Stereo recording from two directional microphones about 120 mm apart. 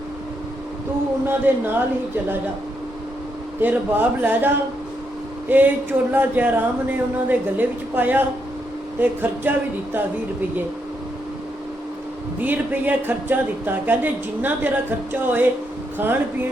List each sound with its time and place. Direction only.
1.3 s speech: 20° right (ahead or behind)
3.6 s speech: 15° right (ahead or behind)
12.4 s speech: 15° right (ahead or behind)